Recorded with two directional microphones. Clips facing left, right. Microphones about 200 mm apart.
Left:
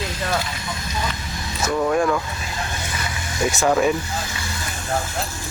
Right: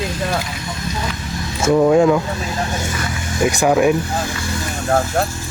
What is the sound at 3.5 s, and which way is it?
Speech, 10° right (ahead or behind).